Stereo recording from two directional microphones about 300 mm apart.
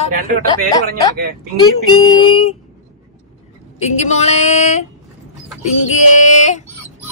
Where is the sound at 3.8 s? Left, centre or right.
Left.